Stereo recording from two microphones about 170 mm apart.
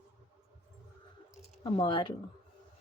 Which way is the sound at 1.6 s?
30° left (ahead or behind).